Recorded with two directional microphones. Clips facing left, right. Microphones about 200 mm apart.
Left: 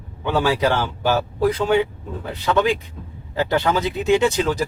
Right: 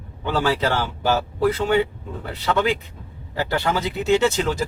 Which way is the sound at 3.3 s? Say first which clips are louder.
Left 3 dB; 20° left (ahead or behind).